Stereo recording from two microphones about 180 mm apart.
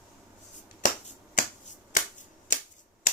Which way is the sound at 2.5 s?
45° left (ahead or behind).